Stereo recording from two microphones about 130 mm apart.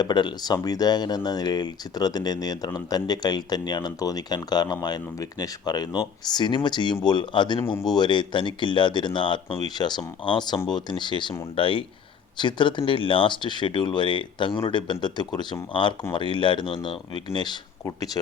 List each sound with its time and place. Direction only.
0.0 s speech: 35° left (ahead or behind)